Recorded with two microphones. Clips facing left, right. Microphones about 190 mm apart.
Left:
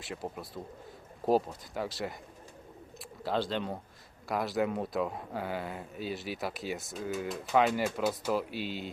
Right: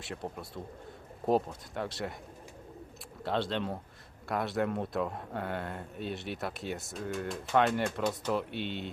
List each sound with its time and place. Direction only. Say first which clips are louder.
0.0 s speech: even; centre (ahead or behind)
3.2 s speech: even; centre (ahead or behind)